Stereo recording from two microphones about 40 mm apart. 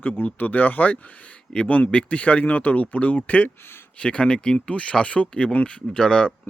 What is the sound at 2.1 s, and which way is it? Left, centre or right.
Speech, left.